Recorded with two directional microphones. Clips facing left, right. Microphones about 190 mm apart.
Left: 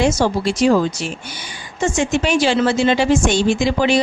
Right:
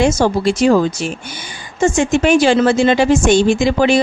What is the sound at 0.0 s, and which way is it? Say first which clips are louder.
A woman's voice: right 3 dB; 50° right (ahead or behind).